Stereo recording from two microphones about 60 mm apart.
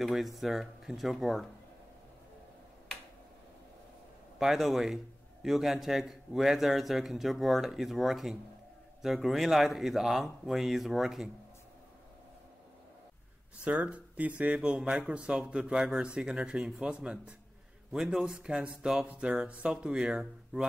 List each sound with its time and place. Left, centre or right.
0.0 s a man's voice: centre
4.4 s a man's voice: centre
13.6 s speech: right
17.9 s speech: centre